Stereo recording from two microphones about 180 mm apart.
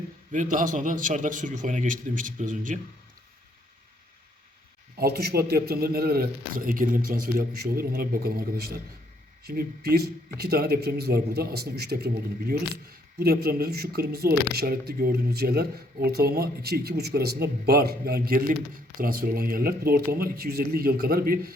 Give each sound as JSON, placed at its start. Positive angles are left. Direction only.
{"t": 0.5, "sound": "a man's voice", "side_deg": -45}
{"t": 4.9, "sound": "speech", "side_deg": -60}